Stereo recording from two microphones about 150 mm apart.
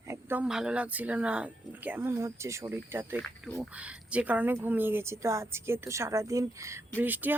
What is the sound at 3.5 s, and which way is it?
Speech, 10° right (ahead or behind).